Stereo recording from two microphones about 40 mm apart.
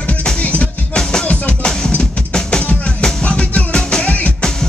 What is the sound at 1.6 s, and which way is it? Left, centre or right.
Music, centre.